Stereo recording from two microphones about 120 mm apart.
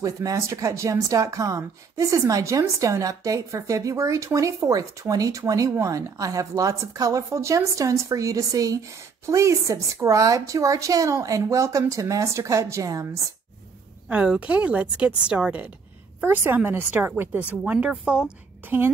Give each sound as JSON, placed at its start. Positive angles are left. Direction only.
{"t": 0.0, "sound": "speech", "side_deg": -30}
{"t": 14.0, "sound": "a woman's voice", "side_deg": -10}